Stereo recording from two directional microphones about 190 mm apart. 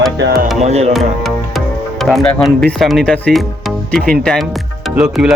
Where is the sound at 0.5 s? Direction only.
35° right (ahead or behind).